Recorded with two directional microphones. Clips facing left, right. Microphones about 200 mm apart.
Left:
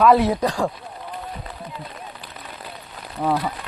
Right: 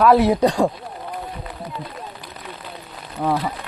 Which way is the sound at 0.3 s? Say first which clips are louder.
Right 5 dB; 20° right (ahead or behind).